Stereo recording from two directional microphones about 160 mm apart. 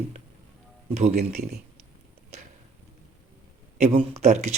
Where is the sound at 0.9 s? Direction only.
45° right (ahead or behind).